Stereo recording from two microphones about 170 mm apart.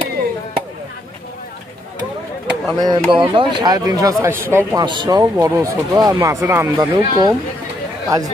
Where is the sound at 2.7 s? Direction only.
25° right (ahead or behind).